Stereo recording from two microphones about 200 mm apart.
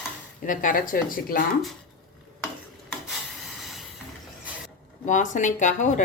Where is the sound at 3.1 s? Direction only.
Centre (ahead or behind).